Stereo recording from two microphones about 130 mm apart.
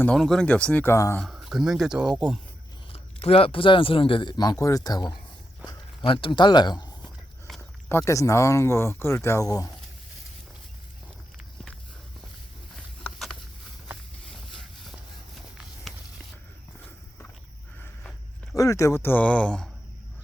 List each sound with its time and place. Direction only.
0.0 s speech: 5° left (ahead or behind)
1.2 s speech: centre (ahead or behind)
2.9 s speech: 50° left (ahead or behind); by 7.1 s 35° left (ahead or behind)
7.9 s speech: 20° left (ahead or behind)
13.0 s a sound: centre (ahead or behind)
18.5 s speech: 25° left (ahead or behind); by 19.7 s 5° left (ahead or behind)